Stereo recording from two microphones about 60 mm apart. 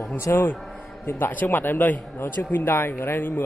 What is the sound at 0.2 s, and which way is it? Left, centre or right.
Speech, left.